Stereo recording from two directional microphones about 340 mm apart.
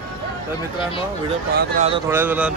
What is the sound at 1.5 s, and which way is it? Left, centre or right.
Speech, right.